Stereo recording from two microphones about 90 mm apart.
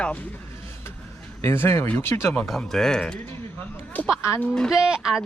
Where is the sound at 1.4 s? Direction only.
30° left (ahead or behind).